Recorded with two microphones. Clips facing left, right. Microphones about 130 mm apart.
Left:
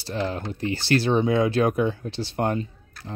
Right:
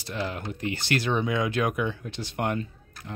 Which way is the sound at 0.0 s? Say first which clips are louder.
Left 4 dB; 30° left (ahead or behind).